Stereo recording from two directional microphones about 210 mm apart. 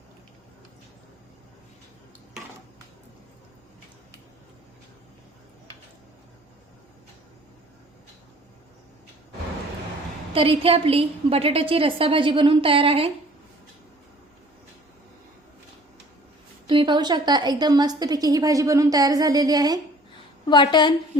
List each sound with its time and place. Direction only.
10.3 s a woman's voice: 25° right (ahead or behind)
16.6 s a woman's voice: 25° right (ahead or behind)
20.5 s a woman's voice: 20° left (ahead or behind)